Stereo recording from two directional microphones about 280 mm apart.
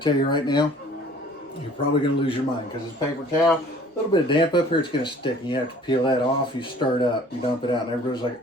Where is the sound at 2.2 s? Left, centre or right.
Centre.